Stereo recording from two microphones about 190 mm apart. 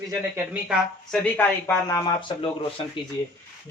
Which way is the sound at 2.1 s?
25° left (ahead or behind).